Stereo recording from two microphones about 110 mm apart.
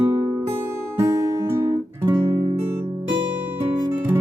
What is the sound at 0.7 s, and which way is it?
Guitar, 25° right (ahead or behind).